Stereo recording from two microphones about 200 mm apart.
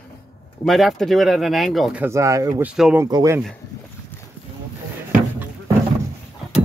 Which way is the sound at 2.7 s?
5° right (ahead or behind).